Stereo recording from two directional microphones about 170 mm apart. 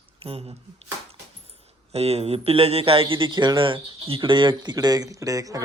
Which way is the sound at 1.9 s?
35° right (ahead or behind).